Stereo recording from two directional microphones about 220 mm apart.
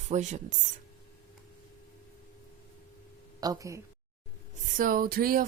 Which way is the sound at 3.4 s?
15° right (ahead or behind).